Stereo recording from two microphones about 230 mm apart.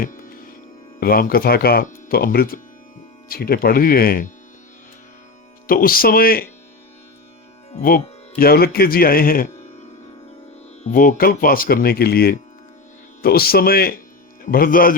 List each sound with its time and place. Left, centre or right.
0.0 s music: left
0.9 s speech: left
5.6 s speech: left
7.8 s speech: left
10.8 s speech: left